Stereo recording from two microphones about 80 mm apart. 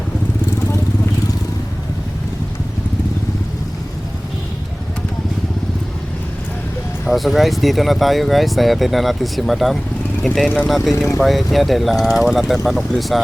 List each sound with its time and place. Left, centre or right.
7.1 s speech: centre
10.9 s speech: left
11.2 s speech: centre